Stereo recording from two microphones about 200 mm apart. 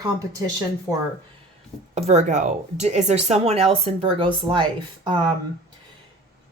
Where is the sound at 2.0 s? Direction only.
35° right (ahead or behind).